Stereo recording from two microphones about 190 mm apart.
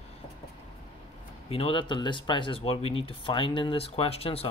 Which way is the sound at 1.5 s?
30° left (ahead or behind).